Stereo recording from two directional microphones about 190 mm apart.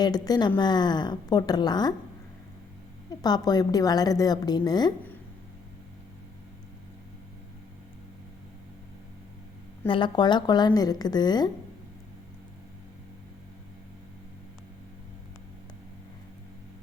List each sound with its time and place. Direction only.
0.0 s a woman's voice: 20° left (ahead or behind)
3.2 s a woman's voice: 20° left (ahead or behind)
9.8 s a woman's voice: 25° left (ahead or behind)